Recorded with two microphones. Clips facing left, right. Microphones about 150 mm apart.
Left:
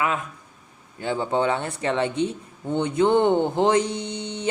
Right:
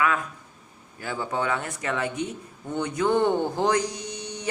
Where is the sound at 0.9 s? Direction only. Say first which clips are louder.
Left 5 dB; 25° left (ahead or behind).